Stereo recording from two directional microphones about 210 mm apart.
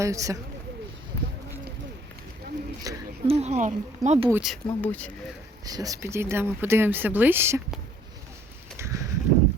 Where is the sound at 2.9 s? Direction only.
15° right (ahead or behind).